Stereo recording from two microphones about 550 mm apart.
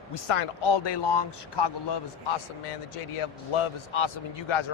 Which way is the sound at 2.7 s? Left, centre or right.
Left.